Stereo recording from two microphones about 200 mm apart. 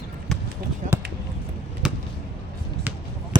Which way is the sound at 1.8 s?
5° right (ahead or behind).